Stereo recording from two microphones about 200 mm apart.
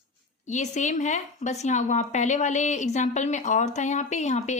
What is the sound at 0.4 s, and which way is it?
A woman's voice, 35° left (ahead or behind).